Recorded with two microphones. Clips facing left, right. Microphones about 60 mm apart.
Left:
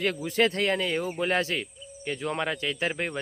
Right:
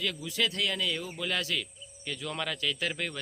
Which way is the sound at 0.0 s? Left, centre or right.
Left.